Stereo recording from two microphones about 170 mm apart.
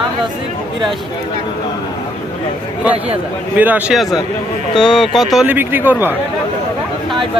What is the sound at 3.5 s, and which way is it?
A man's voice, 10° right (ahead or behind).